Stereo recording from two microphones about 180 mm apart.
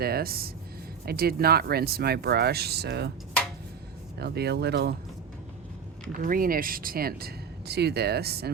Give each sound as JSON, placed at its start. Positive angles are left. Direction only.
{"t": 0.0, "sound": "speech", "side_deg": -60}
{"t": 4.2, "sound": "speech", "side_deg": -65}
{"t": 6.1, "sound": "speech", "side_deg": -50}